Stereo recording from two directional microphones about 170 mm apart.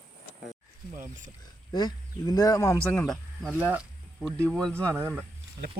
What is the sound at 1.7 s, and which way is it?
Speech, 20° left (ahead or behind).